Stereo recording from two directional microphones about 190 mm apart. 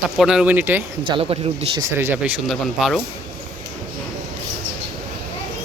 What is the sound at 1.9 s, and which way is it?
Speech, 15° right (ahead or behind).